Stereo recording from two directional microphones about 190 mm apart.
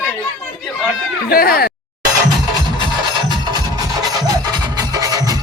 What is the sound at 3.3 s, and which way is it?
Music, 20° right (ahead or behind).